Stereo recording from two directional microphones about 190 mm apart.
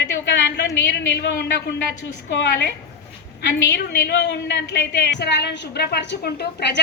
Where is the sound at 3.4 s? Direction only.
65° left (ahead or behind).